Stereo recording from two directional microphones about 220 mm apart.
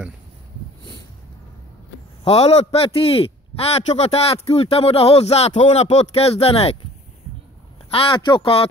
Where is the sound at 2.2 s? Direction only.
30° left (ahead or behind).